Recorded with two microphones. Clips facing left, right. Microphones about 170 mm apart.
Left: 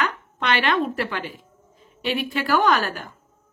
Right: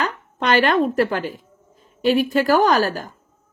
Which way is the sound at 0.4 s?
40° right (ahead or behind).